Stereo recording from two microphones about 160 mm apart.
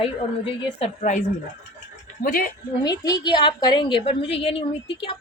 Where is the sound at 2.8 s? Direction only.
25° left (ahead or behind).